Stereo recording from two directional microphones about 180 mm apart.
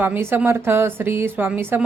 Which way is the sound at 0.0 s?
10° right (ahead or behind).